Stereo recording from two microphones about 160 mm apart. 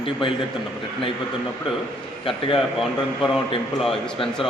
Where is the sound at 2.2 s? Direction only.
35° left (ahead or behind).